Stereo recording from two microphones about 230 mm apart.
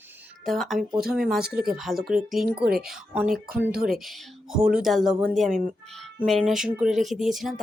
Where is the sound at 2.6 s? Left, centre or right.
Right.